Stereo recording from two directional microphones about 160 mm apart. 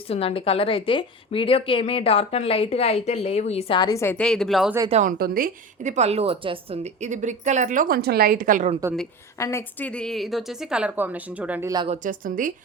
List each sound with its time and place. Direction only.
0.1 s a woman's voice: 35° left (ahead or behind); by 4.7 s centre (ahead or behind)
4.9 s a woman's voice: 45° right (ahead or behind)
5.1 s a woman's voice: 65° right (ahead or behind)
9.4 s a woman's voice: 15° left (ahead or behind); by 11.7 s 10° right (ahead or behind)
11.9 s a woman's voice: 55° right (ahead or behind)